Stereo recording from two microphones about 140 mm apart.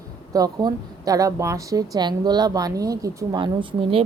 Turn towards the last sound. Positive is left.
turn(degrees=-35)  # may be behind; listen again after turning